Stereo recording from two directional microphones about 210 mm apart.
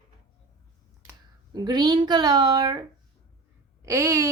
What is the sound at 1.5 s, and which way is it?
Speech, 20° right (ahead or behind).